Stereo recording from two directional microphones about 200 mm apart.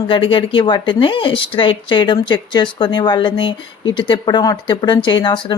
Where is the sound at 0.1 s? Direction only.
25° left (ahead or behind).